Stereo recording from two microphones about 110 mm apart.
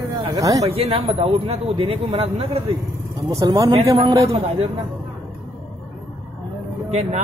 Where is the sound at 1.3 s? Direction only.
70° right (ahead or behind).